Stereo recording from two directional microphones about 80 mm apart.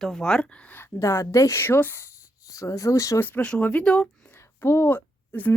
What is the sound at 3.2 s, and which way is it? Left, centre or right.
Speech, centre.